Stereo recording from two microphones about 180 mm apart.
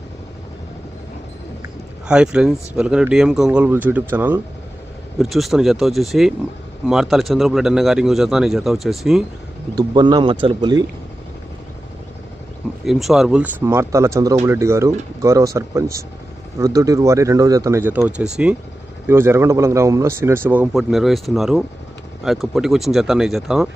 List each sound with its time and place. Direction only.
2.0 s speech: 5° right (ahead or behind)
9.7 s speech: 25° right (ahead or behind)
12.8 s speech: centre (ahead or behind)